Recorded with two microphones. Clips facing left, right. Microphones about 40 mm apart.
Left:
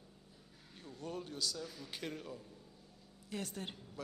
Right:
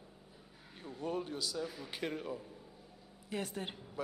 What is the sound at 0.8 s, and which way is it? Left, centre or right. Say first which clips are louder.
Speech: right 6 dB; centre.